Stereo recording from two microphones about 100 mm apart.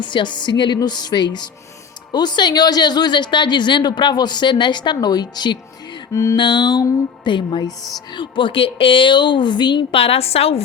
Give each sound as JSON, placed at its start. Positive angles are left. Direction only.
{"t": 0.0, "sound": "a woman's voice", "side_deg": 55}
{"t": 7.8, "sound": "a woman's voice", "side_deg": 0}
{"t": 8.1, "sound": "a woman's voice", "side_deg": 55}
{"t": 10.0, "sound": "a woman's voice", "side_deg": 85}